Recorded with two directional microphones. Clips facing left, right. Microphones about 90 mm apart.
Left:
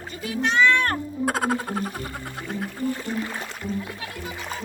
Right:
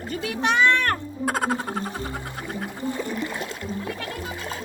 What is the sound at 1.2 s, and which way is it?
Music, centre (ahead or behind).